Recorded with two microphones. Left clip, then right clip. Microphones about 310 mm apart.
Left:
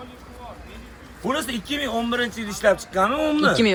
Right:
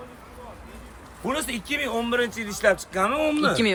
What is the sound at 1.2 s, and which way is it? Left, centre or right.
Speech, centre.